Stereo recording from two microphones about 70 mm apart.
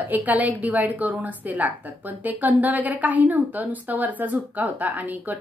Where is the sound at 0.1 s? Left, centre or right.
Right.